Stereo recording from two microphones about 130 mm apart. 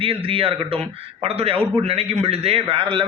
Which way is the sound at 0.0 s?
45° right (ahead or behind).